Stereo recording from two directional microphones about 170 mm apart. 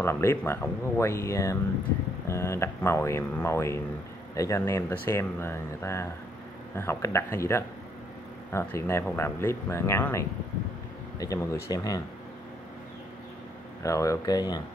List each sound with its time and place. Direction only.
0.0 s speech: 15° left (ahead or behind)
13.8 s speech: 20° left (ahead or behind)